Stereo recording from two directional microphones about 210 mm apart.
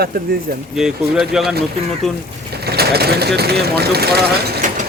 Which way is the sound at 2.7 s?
50° right (ahead or behind).